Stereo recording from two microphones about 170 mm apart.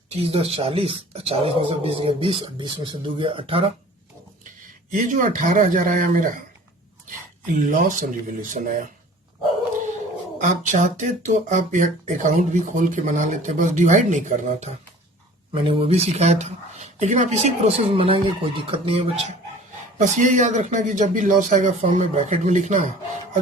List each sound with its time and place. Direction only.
0.1 s speech: 35° right (ahead or behind)
4.9 s speech: 50° right (ahead or behind)
7.4 s speech: 50° right (ahead or behind)
10.4 s speech: 45° right (ahead or behind)
20.0 s speech: 45° right (ahead or behind)